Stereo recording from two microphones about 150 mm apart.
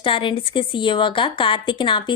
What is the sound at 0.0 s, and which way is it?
A woman's voice, 35° left (ahead or behind).